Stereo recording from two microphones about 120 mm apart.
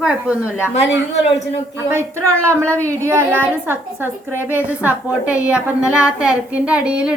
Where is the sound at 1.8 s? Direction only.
20° right (ahead or behind).